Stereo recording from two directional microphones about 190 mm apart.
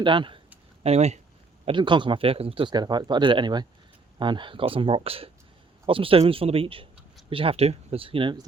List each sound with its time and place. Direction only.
0.0 s speech: 25° right (ahead or behind)
1.6 s speech: 25° right (ahead or behind)